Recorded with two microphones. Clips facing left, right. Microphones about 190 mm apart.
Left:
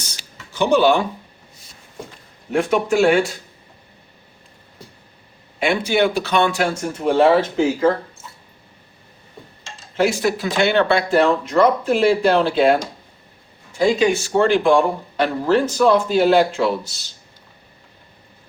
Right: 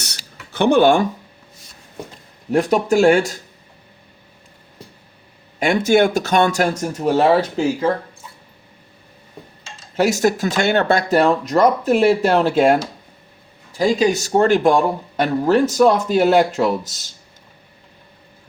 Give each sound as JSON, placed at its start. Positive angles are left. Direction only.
{"t": 0.0, "sound": "a sound", "side_deg": -65}
{"t": 2.5, "sound": "speech", "side_deg": -35}
{"t": 5.5, "sound": "speech", "side_deg": -45}
{"t": 9.9, "sound": "speech", "side_deg": -40}
{"t": 13.7, "sound": "speech", "side_deg": -40}